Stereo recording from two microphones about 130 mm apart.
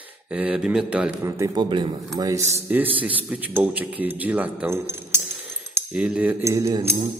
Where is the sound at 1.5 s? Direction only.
35° right (ahead or behind).